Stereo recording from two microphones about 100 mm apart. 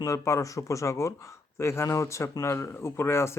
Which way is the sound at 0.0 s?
30° left (ahead or behind).